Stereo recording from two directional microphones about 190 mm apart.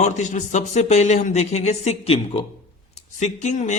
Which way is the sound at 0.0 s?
40° left (ahead or behind).